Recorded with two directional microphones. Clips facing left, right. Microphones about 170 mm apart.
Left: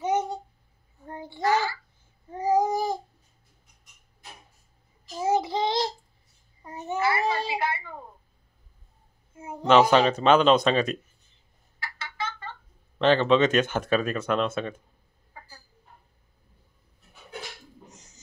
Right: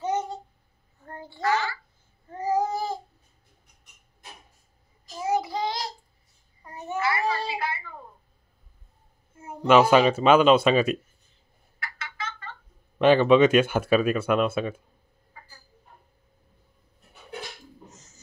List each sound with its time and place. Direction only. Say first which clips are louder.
0.0 s a sound: left 2 dB; 10° left (ahead or behind)
1.0 s child singing: left 3 dB; 15° left (ahead or behind)
2.3 s babbling: left 2 dB; 15° left (ahead or behind)
5.2 s child singing: left 2 dB; 25° left (ahead or behind)
9.7 s speech: right 1 dB; 10° right (ahead or behind)
12.0 s fowl: left 4 dB; 30° left (ahead or behind)
13.0 s speech: right 3 dB; 10° right (ahead or behind)
17.8 s bird: right 1 dB; 15° left (ahead or behind)